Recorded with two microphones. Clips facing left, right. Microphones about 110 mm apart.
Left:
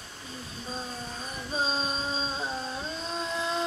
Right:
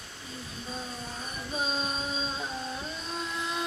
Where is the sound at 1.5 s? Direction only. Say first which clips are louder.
Left 2 dB; 30° left (ahead or behind).